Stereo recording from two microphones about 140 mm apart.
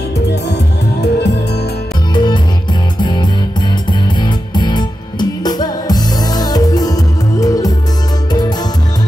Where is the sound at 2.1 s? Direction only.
35° left (ahead or behind).